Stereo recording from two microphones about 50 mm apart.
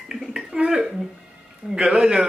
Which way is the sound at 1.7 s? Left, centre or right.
Centre.